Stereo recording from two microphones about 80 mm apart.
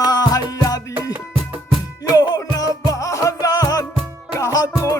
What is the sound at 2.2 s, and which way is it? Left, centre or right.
Music, left.